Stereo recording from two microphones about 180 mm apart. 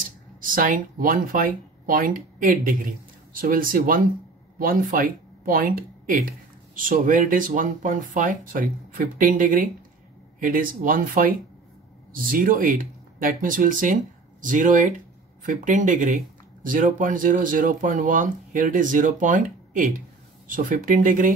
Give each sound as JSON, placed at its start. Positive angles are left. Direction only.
{"t": 0.4, "sound": "speech", "side_deg": -50}